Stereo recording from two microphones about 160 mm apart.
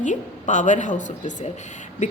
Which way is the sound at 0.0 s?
50° left (ahead or behind).